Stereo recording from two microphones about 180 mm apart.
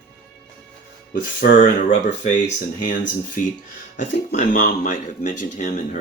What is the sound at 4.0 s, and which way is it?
Speech, 45° left (ahead or behind).